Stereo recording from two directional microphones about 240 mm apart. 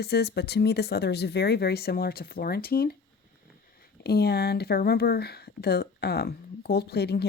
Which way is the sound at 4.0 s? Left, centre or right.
Left.